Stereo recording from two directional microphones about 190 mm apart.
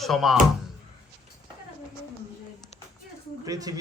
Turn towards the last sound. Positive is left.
turn(degrees=-20)  # may be behind; listen again after turning